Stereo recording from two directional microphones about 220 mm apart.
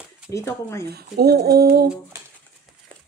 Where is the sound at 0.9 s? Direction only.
45° right (ahead or behind).